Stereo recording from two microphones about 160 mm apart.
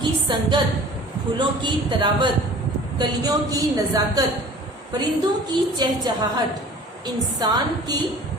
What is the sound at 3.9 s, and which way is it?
Speech, 25° right (ahead or behind).